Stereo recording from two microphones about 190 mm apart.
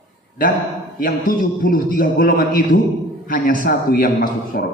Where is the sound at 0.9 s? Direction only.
50° left (ahead or behind).